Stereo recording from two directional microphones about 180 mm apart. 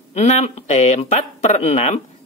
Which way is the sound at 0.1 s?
40° left (ahead or behind).